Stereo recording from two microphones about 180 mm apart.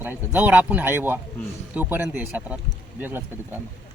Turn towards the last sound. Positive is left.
turn(degrees=-10)  # may be behind; listen again after turning